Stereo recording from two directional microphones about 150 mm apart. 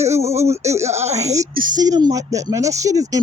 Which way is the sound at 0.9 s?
45° right (ahead or behind).